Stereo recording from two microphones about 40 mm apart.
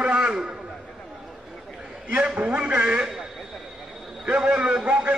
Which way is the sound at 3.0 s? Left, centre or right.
Centre.